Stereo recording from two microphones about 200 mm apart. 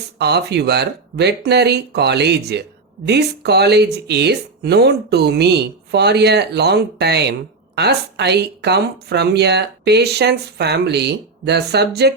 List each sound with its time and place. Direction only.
0.2 s speech: 55° right (ahead or behind)